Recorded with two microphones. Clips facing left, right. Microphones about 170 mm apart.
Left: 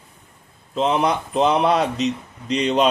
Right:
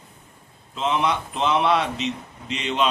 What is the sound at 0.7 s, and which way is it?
A man's voice, 40° left (ahead or behind).